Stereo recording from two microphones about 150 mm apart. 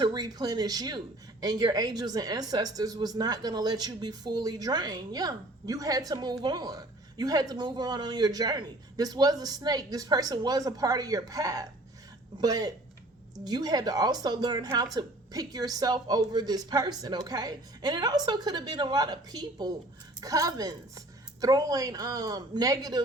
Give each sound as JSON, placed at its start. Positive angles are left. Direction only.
{"t": 0.0, "sound": "speech", "side_deg": -25}